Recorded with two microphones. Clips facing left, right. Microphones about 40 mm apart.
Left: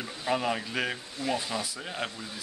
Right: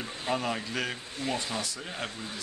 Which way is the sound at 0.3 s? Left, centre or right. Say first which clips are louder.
Left 2 dB; centre.